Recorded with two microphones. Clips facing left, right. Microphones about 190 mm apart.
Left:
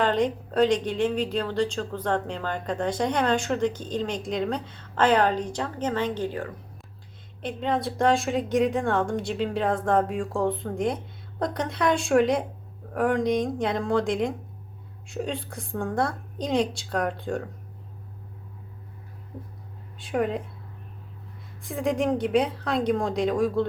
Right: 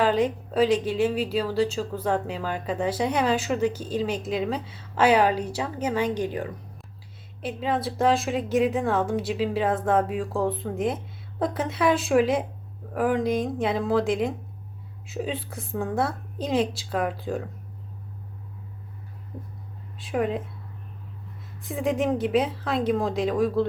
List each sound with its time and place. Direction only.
0.0 s speech: 5° right (ahead or behind)
7.4 s a woman's voice: 5° right (ahead or behind)
20.0 s a woman's voice: centre (ahead or behind)
21.6 s a woman's voice: centre (ahead or behind)